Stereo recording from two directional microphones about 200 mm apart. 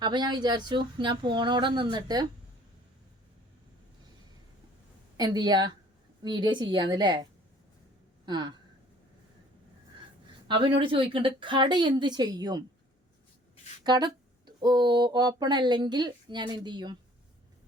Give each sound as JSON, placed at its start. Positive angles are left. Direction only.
{"t": 0.0, "sound": "speech", "side_deg": -20}
{"t": 5.1, "sound": "speech", "side_deg": -20}
{"t": 10.8, "sound": "speech", "side_deg": -25}
{"t": 13.8, "sound": "speech", "side_deg": -20}